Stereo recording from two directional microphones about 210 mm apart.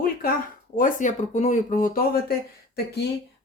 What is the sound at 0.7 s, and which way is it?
Speech, 40° left (ahead or behind).